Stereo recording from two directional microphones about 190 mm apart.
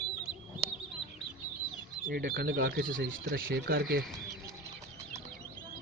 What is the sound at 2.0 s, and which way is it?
Speech, 45° right (ahead or behind).